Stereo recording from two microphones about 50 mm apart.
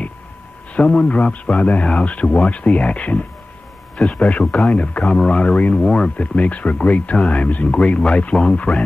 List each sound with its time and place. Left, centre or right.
0.7 s speech: left
6.1 s speech: left